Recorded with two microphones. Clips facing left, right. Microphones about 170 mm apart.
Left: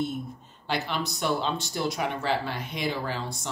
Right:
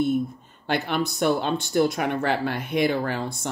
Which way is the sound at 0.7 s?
55° right (ahead or behind).